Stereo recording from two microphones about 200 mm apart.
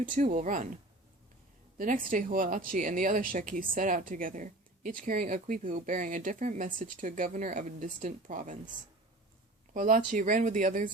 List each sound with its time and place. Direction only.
0.0 s speech: 40° right (ahead or behind)
1.8 s speech: 40° right (ahead or behind)
9.7 s speech: 40° right (ahead or behind)